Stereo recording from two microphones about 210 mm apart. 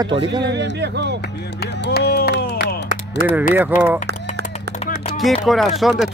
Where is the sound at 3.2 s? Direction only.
10° right (ahead or behind).